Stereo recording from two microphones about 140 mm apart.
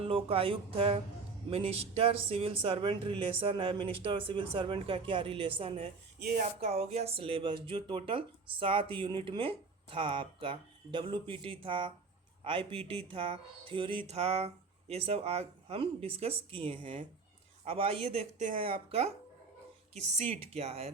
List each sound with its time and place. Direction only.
0.0 s speech: 40° right (ahead or behind)
14.1 s speech: 50° right (ahead or behind)
18.5 s speech: 40° right (ahead or behind)